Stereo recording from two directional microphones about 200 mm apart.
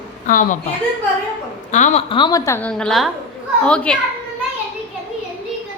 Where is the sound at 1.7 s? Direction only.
35° left (ahead or behind); by 4.0 s 5° left (ahead or behind).